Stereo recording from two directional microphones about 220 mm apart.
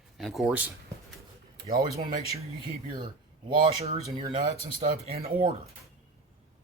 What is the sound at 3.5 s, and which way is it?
Speech, 25° right (ahead or behind).